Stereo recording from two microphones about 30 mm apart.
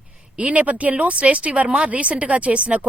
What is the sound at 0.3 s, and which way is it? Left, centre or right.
A woman's voice, right.